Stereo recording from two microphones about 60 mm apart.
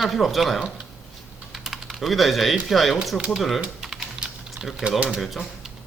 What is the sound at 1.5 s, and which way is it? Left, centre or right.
Typing, centre.